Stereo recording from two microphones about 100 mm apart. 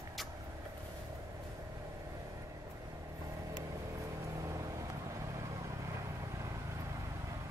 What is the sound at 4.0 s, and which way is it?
Vehicle, 30° right (ahead or behind).